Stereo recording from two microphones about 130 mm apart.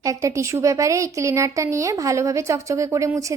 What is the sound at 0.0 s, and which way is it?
A woman's voice, 25° right (ahead or behind).